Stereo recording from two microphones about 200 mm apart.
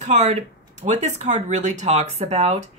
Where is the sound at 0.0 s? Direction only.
35° right (ahead or behind).